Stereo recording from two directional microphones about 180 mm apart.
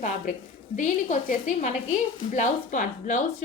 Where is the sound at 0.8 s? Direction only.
40° left (ahead or behind).